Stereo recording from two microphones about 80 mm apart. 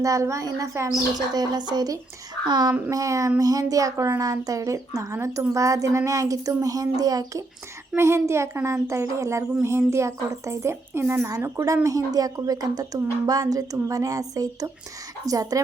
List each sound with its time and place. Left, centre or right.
0.0 s a child's voice: right
1.3 s a woman's voice: right
2.9 s a woman's voice: right
7.9 s a child's voice: right
11.3 s a woman's voice: right